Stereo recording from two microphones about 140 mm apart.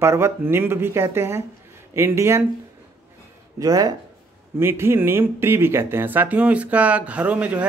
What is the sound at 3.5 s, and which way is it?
A man's voice, 25° right (ahead or behind).